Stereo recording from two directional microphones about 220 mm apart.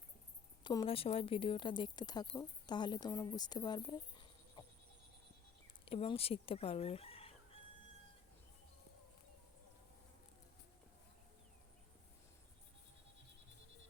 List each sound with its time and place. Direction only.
0.6 s speech: 20° left (ahead or behind)
5.8 s speech: 25° left (ahead or behind)